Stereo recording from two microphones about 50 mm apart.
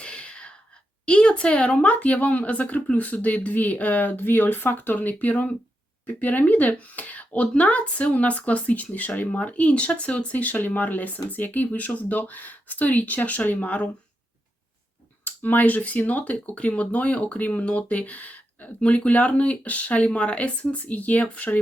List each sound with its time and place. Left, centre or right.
0.0 s sneeze: left
1.0 s speech: left
15.2 s speech: left